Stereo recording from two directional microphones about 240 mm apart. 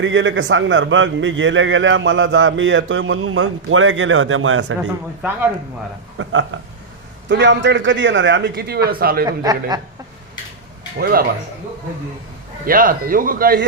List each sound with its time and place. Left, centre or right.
0.0 s a man's voice: right
6.1 s a man's voice: right
9.2 s speech: centre
10.9 s a man's voice: right
12.6 s a man's voice: right